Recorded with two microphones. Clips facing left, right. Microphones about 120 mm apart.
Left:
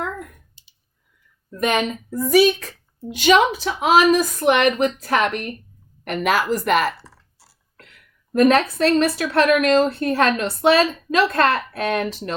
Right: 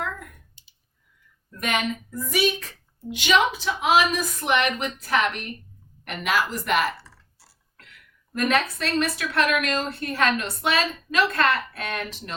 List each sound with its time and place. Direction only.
1.6 s a woman's voice: 35° left (ahead or behind)
8.3 s a woman's voice: 40° left (ahead or behind)